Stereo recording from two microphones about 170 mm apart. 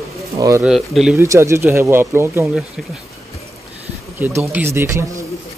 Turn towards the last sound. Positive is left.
turn(degrees=-15)  # may be behind; listen again after turning